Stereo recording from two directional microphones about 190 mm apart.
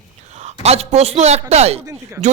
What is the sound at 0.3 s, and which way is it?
A man's voice, 35° right (ahead or behind).